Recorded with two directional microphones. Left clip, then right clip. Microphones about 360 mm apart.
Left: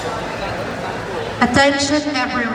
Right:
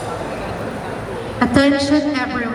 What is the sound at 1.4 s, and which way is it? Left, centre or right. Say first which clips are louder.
A man's voice: left 1 dB; centre.